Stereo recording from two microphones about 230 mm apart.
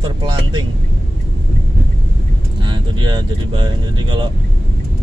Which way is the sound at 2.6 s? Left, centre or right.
Centre.